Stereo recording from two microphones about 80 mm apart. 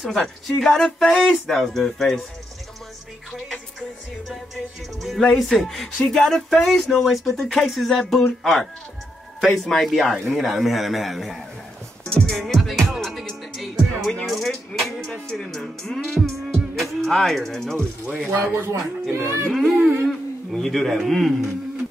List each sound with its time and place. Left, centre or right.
0.0 s speech: centre
5.0 s speech: centre
12.1 s music: centre
14.2 s speech: centre
14.8 s music: centre
15.2 s speech: centre
18.3 s speech: right
19.5 s a man's voice: centre